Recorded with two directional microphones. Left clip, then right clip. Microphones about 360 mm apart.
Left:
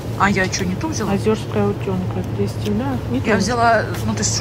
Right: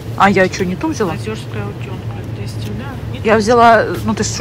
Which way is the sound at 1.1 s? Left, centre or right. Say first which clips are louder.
Left 6 dB; left.